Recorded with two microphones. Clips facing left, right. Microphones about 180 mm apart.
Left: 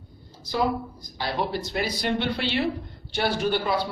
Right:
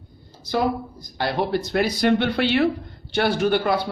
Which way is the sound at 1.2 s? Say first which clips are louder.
Right 5 dB; 60° right (ahead or behind).